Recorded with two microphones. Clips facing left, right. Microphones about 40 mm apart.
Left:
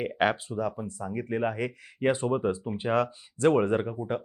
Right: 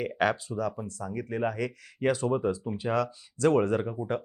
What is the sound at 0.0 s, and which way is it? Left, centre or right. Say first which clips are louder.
Speech: left 1 dB; left.